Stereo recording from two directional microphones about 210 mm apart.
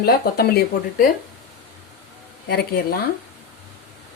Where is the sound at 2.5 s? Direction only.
50° left (ahead or behind).